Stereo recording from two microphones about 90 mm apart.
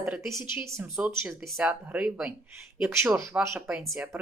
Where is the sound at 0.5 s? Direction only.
30° right (ahead or behind).